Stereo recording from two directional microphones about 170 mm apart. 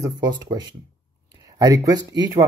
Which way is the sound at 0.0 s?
25° right (ahead or behind).